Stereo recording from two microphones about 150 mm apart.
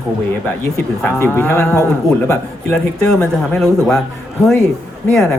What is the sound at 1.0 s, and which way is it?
Speech, 15° left (ahead or behind).